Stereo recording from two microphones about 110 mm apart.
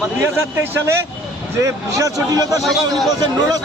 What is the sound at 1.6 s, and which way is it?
Speech, 30° right (ahead or behind).